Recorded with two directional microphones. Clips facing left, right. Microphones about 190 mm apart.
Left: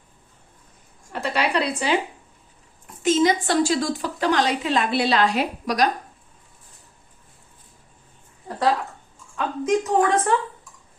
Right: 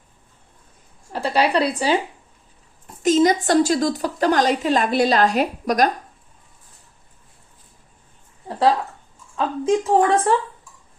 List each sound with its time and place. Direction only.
1.1 s speech: 35° right (ahead or behind)
3.0 s a woman's voice: 40° right (ahead or behind)
8.4 s a sound: 30° right (ahead or behind)
9.3 s a woman's voice: 30° right (ahead or behind)